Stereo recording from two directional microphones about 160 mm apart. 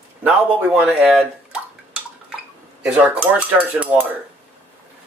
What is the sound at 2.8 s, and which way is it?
Speech, 10° right (ahead or behind).